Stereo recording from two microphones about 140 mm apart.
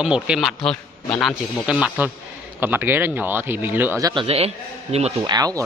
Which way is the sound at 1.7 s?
5° right (ahead or behind).